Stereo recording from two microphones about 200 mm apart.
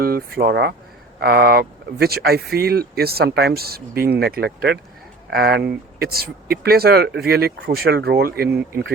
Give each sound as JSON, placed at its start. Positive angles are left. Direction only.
{"t": 0.0, "sound": "speech", "side_deg": -50}